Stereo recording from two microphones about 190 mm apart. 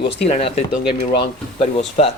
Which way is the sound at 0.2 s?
35° left (ahead or behind).